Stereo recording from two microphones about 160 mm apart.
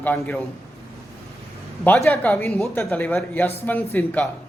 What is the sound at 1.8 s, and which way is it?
Speech, 5° left (ahead or behind).